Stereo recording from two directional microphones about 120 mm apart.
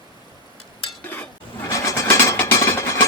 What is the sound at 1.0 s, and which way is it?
Vehicle, 15° left (ahead or behind).